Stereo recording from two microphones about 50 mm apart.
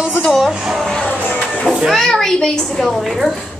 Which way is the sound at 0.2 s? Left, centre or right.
Centre.